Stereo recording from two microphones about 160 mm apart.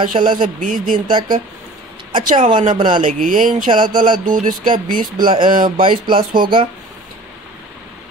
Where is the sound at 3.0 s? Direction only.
55° right (ahead or behind).